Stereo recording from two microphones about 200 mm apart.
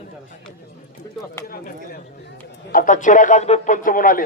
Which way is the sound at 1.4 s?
45° left (ahead or behind).